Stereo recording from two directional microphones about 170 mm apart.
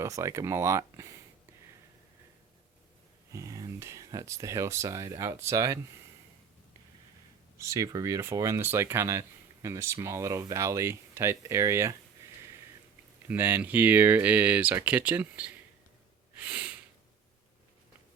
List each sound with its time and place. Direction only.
0.0 s speech: 15° right (ahead or behind)
3.3 s speech: 20° right (ahead or behind)
7.6 s speech: 20° right (ahead or behind)
13.2 s speech: 10° right (ahead or behind)
16.4 s sniff: 10° right (ahead or behind)